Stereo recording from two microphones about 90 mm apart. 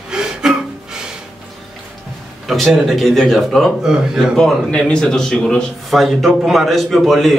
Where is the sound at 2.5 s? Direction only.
Centre (ahead or behind).